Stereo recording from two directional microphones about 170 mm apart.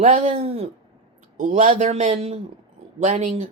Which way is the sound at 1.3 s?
45° right (ahead or behind).